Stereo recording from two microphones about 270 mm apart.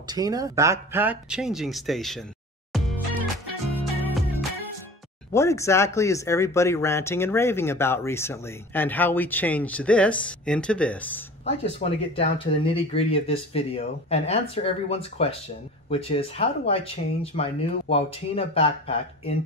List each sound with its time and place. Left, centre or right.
0.0 s speech: centre
2.7 s music: centre
4.0 s music: centre
5.3 s speech: centre
11.8 s speech: left